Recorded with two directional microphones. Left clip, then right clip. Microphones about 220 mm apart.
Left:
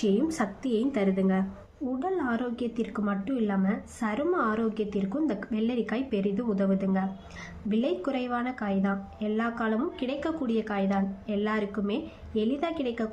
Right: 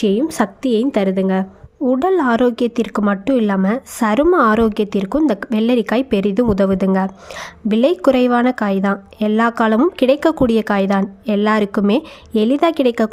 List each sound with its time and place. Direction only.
0.0 s a woman's voice: 40° right (ahead or behind)